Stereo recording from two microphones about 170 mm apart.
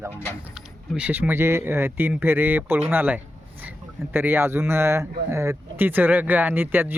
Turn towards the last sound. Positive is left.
turn(degrees=-10)  # may be behind; listen again after turning